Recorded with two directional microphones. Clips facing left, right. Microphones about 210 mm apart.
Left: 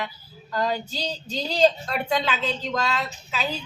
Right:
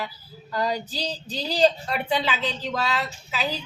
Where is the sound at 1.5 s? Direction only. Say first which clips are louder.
Even; 5° right (ahead or behind).